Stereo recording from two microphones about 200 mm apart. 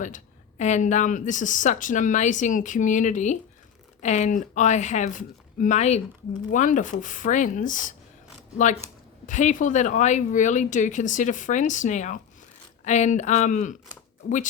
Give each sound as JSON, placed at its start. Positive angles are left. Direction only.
{"t": 0.0, "sound": "speech", "side_deg": 35}
{"t": 9.2, "sound": "speech", "side_deg": 40}